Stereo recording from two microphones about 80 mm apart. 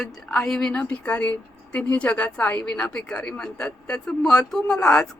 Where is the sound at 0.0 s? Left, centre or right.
Centre.